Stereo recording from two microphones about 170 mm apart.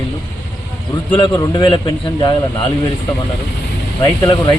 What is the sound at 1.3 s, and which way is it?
Speech, 25° left (ahead or behind).